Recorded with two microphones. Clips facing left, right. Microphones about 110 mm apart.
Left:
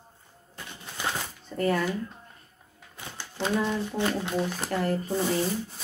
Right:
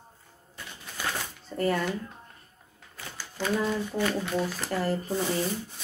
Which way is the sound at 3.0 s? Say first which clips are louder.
Left 2 dB; 20° left (ahead or behind).